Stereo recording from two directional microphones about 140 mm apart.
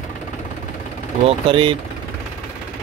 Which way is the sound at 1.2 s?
40° right (ahead or behind).